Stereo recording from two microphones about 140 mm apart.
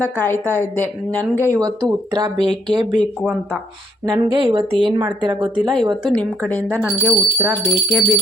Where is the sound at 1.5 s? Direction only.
30° right (ahead or behind).